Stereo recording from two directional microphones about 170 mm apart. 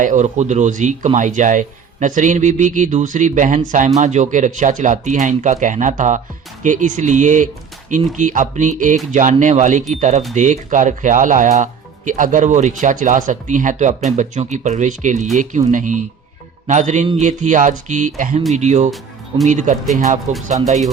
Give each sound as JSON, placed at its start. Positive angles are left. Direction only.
{"t": 0.0, "sound": "speech", "side_deg": -45}